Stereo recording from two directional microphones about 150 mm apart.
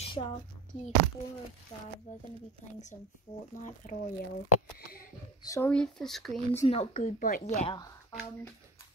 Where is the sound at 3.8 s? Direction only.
65° left (ahead or behind).